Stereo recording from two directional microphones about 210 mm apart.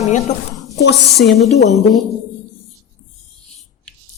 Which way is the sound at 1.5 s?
35° left (ahead or behind).